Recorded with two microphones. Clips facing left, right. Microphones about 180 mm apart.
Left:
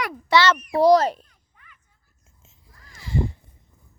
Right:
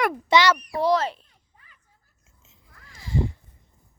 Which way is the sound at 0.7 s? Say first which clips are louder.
Left 6 dB; 40° left (ahead or behind).